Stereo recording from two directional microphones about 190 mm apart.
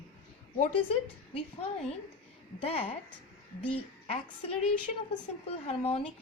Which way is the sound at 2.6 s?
30° left (ahead or behind).